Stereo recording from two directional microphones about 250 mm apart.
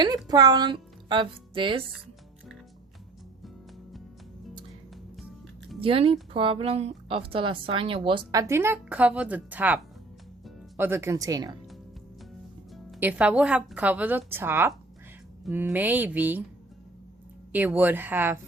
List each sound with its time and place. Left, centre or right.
0.3 s speech: centre
5.8 s a woman's voice: right
12.7 s a woman's voice: centre
17.5 s speech: centre